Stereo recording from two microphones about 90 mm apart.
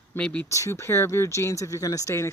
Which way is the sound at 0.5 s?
35° left (ahead or behind).